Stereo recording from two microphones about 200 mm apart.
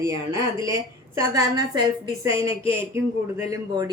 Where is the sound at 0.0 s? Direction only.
15° right (ahead or behind).